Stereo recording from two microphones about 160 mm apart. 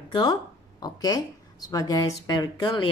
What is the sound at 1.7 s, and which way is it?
Speech, 20° left (ahead or behind).